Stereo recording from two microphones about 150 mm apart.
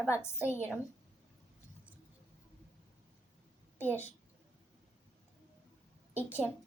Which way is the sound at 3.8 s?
15° left (ahead or behind).